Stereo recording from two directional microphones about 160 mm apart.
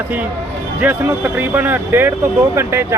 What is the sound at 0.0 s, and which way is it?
Speech, 10° right (ahead or behind).